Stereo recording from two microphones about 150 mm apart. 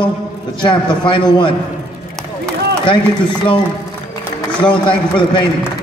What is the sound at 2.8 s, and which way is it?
Speech, 35° left (ahead or behind).